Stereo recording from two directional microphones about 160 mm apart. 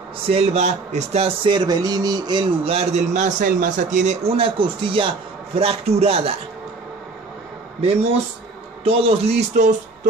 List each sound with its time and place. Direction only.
0.3 s speech: 40° right (ahead or behind)
8.8 s speech: 35° right (ahead or behind)